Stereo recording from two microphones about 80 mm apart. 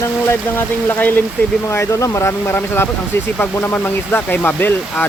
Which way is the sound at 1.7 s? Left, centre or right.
Left.